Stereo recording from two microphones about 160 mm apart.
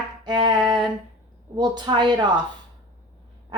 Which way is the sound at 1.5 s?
25° right (ahead or behind).